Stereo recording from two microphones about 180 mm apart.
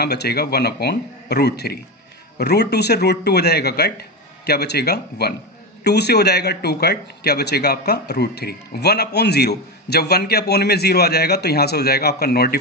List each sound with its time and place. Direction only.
0.0 s a man's voice: 65° left (ahead or behind)